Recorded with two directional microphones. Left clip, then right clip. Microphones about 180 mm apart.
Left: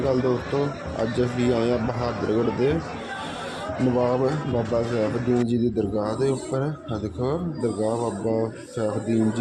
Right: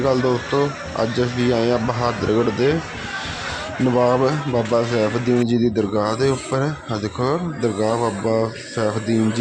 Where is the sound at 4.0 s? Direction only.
20° right (ahead or behind).